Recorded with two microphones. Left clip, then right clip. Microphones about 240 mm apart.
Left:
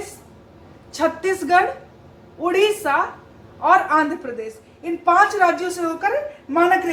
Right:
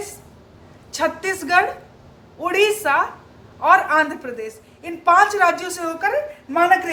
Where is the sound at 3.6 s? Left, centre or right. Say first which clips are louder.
Right 1 dB; right.